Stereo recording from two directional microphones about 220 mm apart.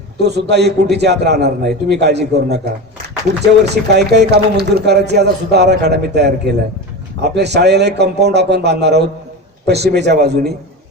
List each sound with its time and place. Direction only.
0.2 s speech: 50° right (ahead or behind)